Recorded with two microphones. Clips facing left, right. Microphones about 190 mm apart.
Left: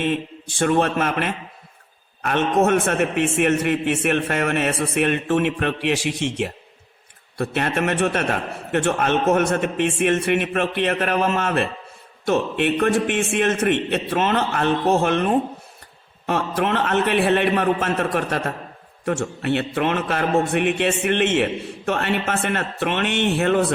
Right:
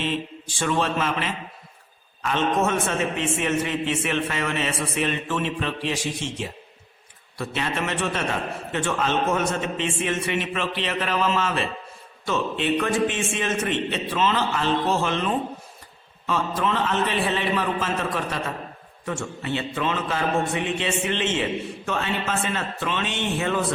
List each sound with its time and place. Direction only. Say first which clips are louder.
0.0 s a man's voice: left 4 dB; 55° left (ahead or behind)